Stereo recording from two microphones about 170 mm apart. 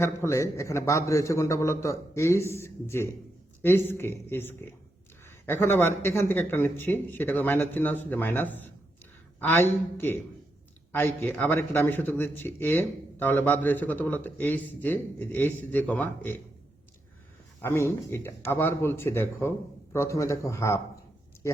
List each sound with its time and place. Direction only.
0.0 s a man's voice: 15° left (ahead or behind)
17.6 s a man's voice: 15° left (ahead or behind)